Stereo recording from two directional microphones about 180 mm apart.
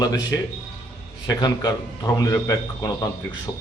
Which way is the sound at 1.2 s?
20° left (ahead or behind).